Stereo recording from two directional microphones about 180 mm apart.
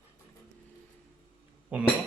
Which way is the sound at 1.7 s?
5° right (ahead or behind).